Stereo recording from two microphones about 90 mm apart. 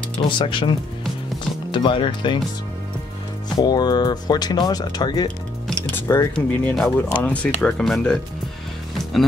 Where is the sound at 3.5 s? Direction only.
50° left (ahead or behind).